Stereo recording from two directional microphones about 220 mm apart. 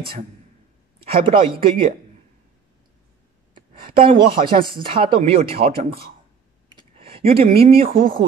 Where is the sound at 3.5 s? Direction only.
25° right (ahead or behind).